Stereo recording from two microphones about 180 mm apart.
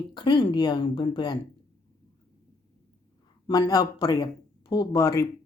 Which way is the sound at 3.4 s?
20° left (ahead or behind).